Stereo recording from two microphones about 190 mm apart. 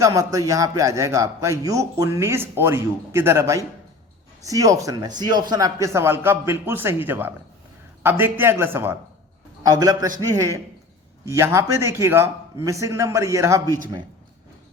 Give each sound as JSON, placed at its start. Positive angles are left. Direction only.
{"t": 0.0, "sound": "a man's voice", "side_deg": -15}